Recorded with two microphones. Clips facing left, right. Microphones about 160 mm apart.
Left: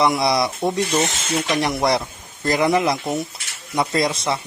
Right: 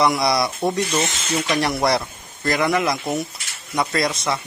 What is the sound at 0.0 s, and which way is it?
Speech, 25° left (ahead or behind).